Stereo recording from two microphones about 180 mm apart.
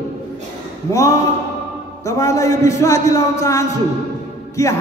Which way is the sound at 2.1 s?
15° left (ahead or behind).